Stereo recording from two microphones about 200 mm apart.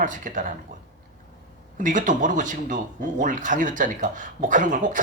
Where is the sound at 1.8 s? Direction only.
40° right (ahead or behind).